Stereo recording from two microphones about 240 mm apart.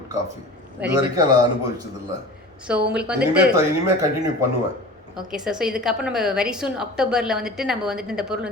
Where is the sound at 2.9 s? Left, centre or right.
Centre.